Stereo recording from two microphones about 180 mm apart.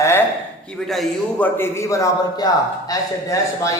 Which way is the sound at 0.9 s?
5° left (ahead or behind).